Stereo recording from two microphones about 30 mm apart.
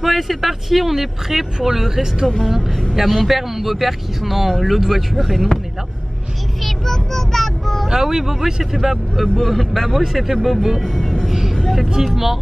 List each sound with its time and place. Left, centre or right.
0.0 s speech: centre
2.2 s speech: centre
3.3 s speech: centre
6.6 s vehicle: centre
7.9 s speech: centre
9.4 s speech: centre
11.0 s vehicle: centre
12.0 s speech: centre